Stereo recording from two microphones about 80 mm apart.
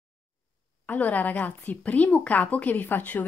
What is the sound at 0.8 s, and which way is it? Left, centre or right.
Speech, left.